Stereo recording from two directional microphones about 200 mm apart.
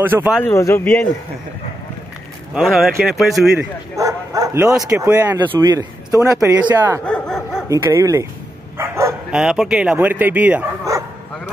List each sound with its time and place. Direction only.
0.0 s speech: 10° right (ahead or behind)
0.3 s speech: 10° left (ahead or behind)
2.5 s speech: centre (ahead or behind)
3.9 s speech: 15° right (ahead or behind)
7.1 s dog: centre (ahead or behind)
7.6 s speech: 15° right (ahead or behind)
8.7 s bow-wow: 15° right (ahead or behind)
9.4 s speech: 5° right (ahead or behind)